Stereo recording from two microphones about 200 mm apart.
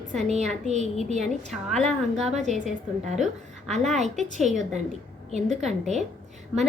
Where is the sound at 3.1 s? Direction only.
Centre (ahead or behind).